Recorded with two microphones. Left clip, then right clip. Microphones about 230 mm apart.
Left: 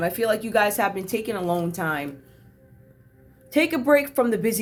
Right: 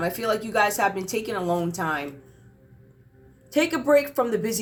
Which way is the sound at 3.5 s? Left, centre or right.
Left.